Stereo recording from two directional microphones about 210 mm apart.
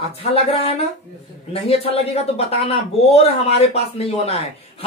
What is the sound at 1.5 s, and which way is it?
A man's voice, 25° left (ahead or behind).